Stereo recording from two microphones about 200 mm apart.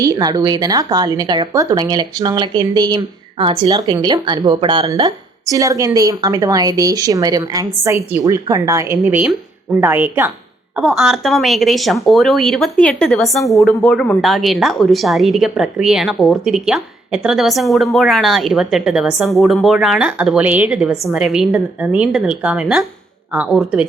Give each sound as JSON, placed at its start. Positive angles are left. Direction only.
{"t": 0.0, "sound": "a woman's voice", "side_deg": -20}